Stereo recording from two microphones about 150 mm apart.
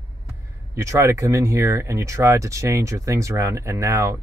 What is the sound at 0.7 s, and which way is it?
Speech, 20° right (ahead or behind).